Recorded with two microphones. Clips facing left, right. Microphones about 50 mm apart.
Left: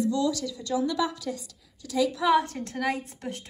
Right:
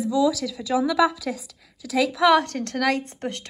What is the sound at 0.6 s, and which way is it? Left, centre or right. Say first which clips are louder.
Speech: right 5 dB; right.